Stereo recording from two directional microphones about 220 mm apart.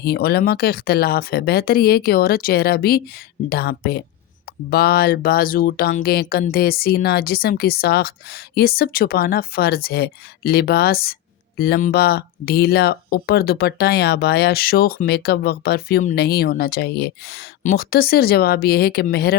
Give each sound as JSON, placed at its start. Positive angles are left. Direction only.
{"t": 0.0, "sound": "speech", "side_deg": 45}